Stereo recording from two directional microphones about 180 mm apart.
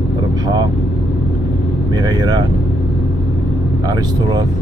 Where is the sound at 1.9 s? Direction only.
20° right (ahead or behind).